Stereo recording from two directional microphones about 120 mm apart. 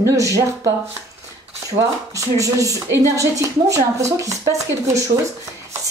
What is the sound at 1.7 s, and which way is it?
A woman's voice, 25° right (ahead or behind).